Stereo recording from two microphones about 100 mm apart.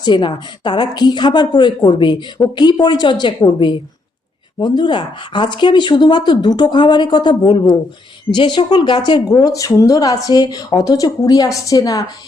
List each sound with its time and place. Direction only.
0.0 s speech: 50° left (ahead or behind)